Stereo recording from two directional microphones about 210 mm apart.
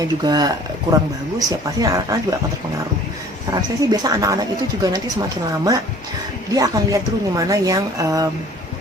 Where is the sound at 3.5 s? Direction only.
15° right (ahead or behind).